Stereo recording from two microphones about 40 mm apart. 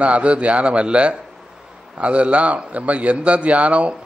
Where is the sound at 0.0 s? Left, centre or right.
Right.